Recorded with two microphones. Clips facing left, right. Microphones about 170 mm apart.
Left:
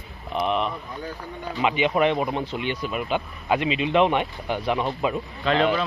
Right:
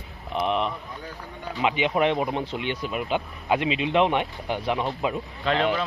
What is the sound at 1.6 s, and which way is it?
Speech, 15° right (ahead or behind).